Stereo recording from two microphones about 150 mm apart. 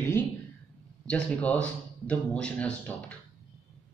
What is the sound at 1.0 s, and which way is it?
Speech, 5° left (ahead or behind).